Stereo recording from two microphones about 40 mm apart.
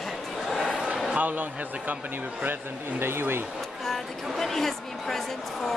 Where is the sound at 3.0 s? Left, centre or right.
Right.